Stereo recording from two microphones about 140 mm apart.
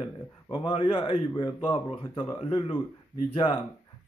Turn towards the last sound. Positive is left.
turn(degrees=35)  # may be behind; listen again after turning